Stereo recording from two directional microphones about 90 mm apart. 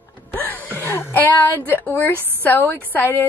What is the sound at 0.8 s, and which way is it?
A woman's voice, 25° left (ahead or behind).